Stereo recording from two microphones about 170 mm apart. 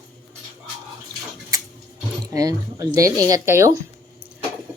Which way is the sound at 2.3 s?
20° right (ahead or behind).